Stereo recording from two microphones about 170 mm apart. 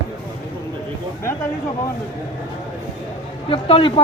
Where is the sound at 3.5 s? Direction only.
30° left (ahead or behind).